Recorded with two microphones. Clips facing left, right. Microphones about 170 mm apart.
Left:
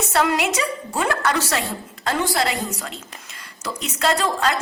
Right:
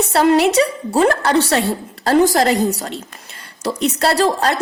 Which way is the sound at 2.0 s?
40° right (ahead or behind).